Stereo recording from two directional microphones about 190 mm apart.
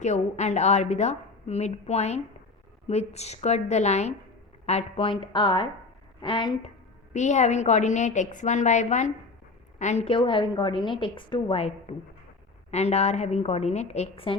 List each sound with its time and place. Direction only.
0.0 s a woman's voice: 35° left (ahead or behind)
7.1 s a woman's voice: 40° left (ahead or behind)